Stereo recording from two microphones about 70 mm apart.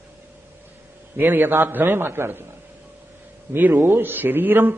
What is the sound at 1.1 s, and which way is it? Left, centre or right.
A man's voice, right.